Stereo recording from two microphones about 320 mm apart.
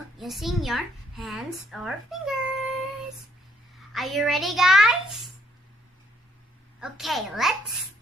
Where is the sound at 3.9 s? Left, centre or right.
Centre.